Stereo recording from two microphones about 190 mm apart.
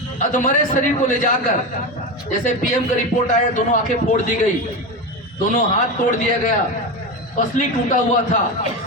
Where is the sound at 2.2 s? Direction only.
40° left (ahead or behind).